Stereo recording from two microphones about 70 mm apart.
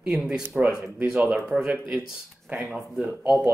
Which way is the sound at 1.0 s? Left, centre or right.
Right.